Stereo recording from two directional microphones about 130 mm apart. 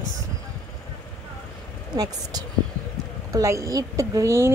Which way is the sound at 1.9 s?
30° right (ahead or behind).